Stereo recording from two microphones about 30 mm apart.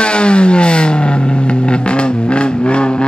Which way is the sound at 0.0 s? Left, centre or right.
Left.